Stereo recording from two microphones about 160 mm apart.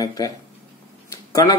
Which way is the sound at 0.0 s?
20° left (ahead or behind).